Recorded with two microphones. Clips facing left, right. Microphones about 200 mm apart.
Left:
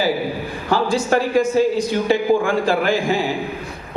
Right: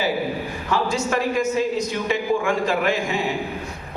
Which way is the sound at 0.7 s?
35° left (ahead or behind).